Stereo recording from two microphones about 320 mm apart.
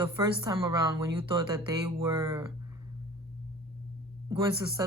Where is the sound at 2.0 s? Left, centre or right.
Centre.